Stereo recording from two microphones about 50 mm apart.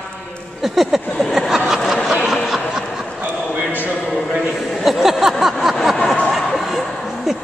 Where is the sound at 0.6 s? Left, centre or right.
Centre.